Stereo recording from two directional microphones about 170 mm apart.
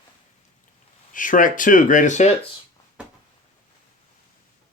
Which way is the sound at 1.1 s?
50° left (ahead or behind).